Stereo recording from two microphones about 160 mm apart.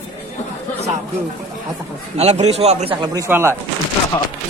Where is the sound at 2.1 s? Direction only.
45° right (ahead or behind).